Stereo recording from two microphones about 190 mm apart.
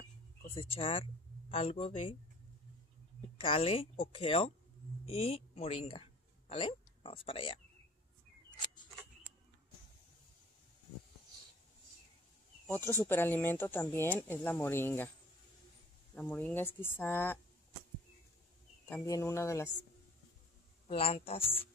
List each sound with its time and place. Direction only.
0.6 s speech: 30° left (ahead or behind)
3.3 s speech: 30° left (ahead or behind)
12.6 s speech: 10° left (ahead or behind)
16.2 s speech: 10° left (ahead or behind)
19.0 s speech: 15° left (ahead or behind)
20.8 s speech: 30° left (ahead or behind)